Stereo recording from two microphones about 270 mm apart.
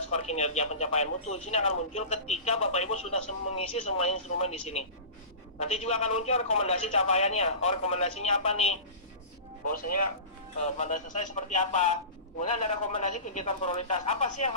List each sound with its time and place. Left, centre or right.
0.1 s speech: left
10.6 s speech: left